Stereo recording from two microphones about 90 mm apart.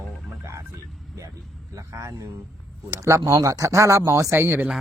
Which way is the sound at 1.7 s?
35° right (ahead or behind).